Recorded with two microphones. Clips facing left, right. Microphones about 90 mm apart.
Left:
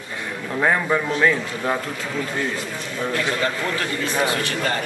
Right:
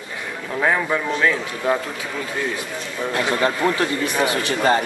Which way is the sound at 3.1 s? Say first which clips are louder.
Right 4 dB; 20° right (ahead or behind).